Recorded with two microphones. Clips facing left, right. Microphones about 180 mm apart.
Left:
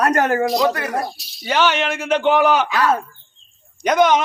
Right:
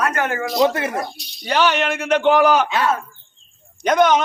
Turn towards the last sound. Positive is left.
turn(degrees=5)  # may be behind; listen again after turning